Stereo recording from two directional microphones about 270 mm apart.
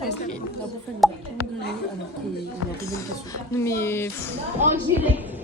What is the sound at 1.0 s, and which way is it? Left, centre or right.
Speech, centre.